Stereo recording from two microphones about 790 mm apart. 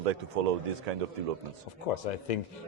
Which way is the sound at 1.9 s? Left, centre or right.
Left.